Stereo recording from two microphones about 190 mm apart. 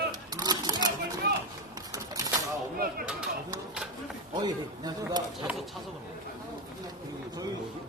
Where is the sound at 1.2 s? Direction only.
60° right (ahead or behind).